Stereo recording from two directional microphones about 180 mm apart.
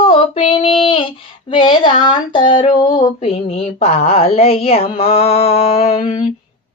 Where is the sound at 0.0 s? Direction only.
30° left (ahead or behind).